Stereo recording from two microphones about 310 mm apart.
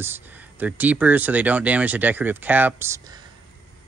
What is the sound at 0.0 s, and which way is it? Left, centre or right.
Speech, centre.